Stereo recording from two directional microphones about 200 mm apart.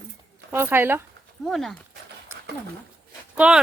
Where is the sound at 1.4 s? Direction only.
Centre (ahead or behind).